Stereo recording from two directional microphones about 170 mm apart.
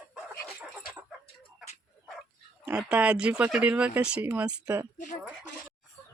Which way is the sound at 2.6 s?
5° right (ahead or behind).